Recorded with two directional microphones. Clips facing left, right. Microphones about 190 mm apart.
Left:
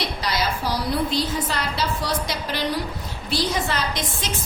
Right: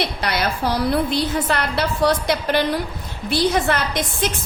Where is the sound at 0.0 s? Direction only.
60° right (ahead or behind).